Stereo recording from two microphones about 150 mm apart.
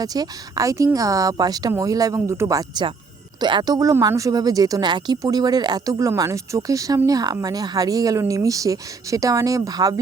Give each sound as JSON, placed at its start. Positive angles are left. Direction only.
{"t": 0.0, "sound": "speech", "side_deg": -25}